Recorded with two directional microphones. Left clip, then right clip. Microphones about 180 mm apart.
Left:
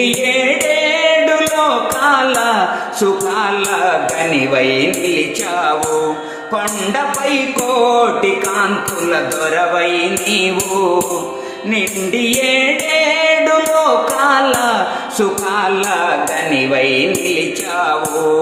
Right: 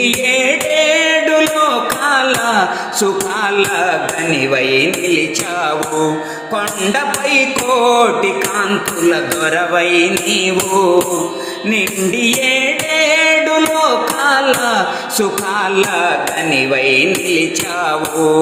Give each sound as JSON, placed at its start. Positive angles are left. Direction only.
{"t": 0.0, "sound": "music", "side_deg": -25}
{"t": 4.5, "sound": "music", "side_deg": -30}
{"t": 7.9, "sound": "music", "side_deg": -25}
{"t": 9.4, "sound": "music", "side_deg": -35}
{"t": 12.2, "sound": "music", "side_deg": -30}
{"t": 16.7, "sound": "music", "side_deg": -30}